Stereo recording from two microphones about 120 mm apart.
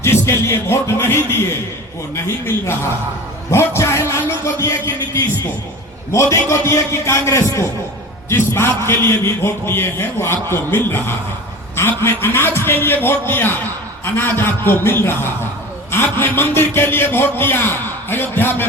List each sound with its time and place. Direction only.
0.0 s a man's voice: 20° left (ahead or behind)
6.1 s a man's voice: 25° left (ahead or behind)